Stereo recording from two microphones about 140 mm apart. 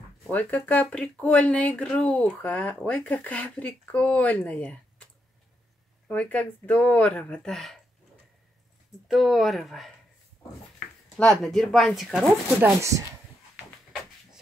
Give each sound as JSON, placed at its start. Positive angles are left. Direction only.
{"t": 0.3, "sound": "speech", "side_deg": 10}
{"t": 6.0, "sound": "speech", "side_deg": 10}
{"t": 9.0, "sound": "speech", "side_deg": 0}
{"t": 11.1, "sound": "speech", "side_deg": 5}
{"t": 12.6, "sound": "speech", "side_deg": -20}